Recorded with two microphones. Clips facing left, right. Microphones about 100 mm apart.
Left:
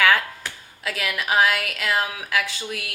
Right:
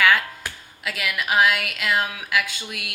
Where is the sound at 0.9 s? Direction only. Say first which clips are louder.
Even; 35° left (ahead or behind).